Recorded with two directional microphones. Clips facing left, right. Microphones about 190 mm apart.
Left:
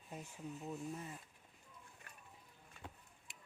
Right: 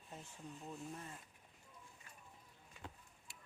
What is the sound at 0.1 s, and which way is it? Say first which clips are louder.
Speech: left 4 dB; 10° left (ahead or behind).